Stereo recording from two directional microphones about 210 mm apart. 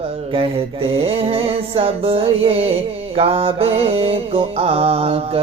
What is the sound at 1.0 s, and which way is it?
Mantra, 25° right (ahead or behind).